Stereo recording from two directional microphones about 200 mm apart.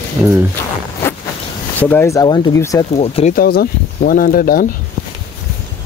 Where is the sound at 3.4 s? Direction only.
50° left (ahead or behind).